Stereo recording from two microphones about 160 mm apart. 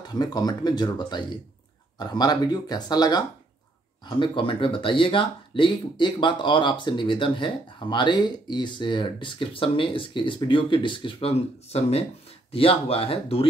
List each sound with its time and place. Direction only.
0.1 s speech: 25° left (ahead or behind)